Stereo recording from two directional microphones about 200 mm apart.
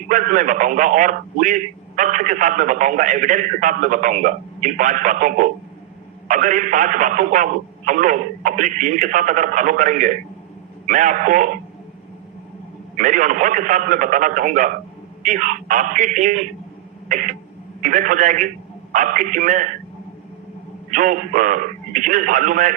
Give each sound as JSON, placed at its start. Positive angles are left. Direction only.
{"t": 0.1, "sound": "a man's voice", "side_deg": -40}
{"t": 13.0, "sound": "a man's voice", "side_deg": -40}
{"t": 20.9, "sound": "a man's voice", "side_deg": -40}